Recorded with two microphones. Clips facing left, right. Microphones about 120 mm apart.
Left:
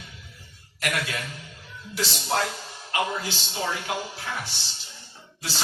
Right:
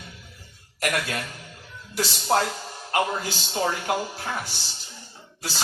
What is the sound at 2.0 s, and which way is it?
Speech, 40° right (ahead or behind).